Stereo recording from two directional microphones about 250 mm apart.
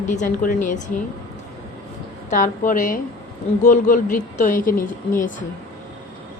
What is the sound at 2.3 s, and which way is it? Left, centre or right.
A woman's voice, left.